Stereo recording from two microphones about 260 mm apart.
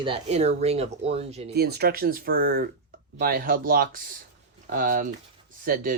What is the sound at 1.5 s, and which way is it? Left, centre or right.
Speech, right.